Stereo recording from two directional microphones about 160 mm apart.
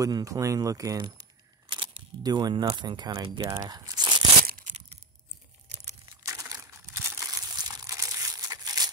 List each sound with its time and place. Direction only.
0.0 s speech: 20° right (ahead or behind)
4.5 s a sound: 60° right (ahead or behind)
6.0 s crumpling: 20° right (ahead or behind)